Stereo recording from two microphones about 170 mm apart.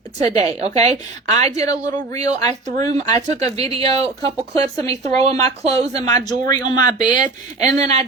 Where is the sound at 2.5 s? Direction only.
45° right (ahead or behind).